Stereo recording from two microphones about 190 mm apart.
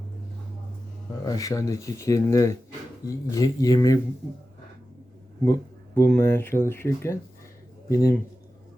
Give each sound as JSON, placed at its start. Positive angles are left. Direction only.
{"t": 1.2, "sound": "speech", "side_deg": 20}
{"t": 5.5, "sound": "speech", "side_deg": 10}